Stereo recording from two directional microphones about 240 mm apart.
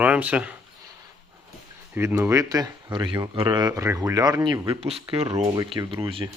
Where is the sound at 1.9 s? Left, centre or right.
Centre.